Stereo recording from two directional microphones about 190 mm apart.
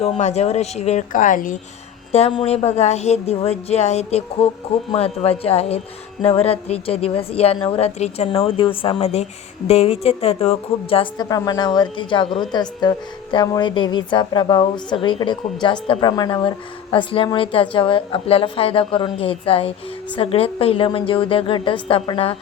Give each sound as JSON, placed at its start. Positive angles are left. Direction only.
{"t": 0.0, "sound": "a woman's voice", "side_deg": 35}
{"t": 2.1, "sound": "a woman's voice", "side_deg": 35}